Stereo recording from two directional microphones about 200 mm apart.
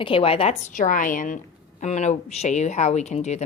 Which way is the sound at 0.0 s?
25° left (ahead or behind).